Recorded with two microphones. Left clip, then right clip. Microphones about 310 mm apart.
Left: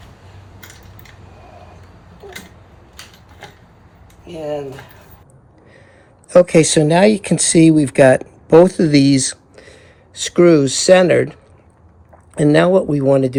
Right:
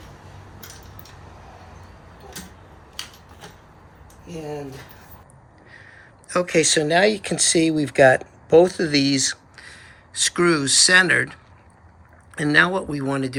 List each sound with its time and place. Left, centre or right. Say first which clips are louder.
6.2 s speech: left 9 dB; centre